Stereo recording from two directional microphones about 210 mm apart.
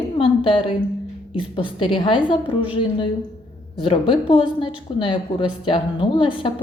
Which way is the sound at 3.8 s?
25° left (ahead or behind).